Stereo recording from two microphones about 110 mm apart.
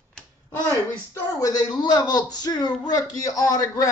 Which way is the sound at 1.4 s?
35° left (ahead or behind).